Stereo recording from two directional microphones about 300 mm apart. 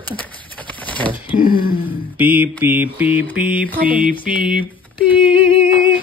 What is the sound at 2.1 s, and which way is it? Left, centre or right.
Speech, centre.